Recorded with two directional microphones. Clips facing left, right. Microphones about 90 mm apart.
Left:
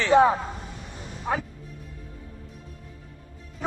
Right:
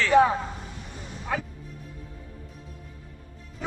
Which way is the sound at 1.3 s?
30° left (ahead or behind).